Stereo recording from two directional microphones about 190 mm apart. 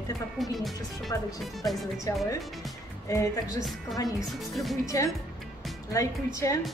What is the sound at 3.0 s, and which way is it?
Speech, 15° left (ahead or behind).